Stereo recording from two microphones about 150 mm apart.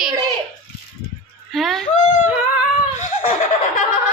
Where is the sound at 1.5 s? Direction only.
Centre (ahead or behind).